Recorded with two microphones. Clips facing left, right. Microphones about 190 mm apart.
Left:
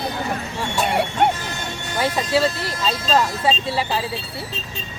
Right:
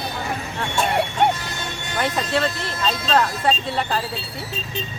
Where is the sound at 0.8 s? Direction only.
5° left (ahead or behind).